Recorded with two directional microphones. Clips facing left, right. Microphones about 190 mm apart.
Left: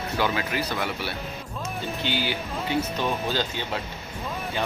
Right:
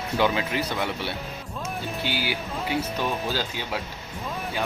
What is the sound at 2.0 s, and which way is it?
Speech, 10° right (ahead or behind).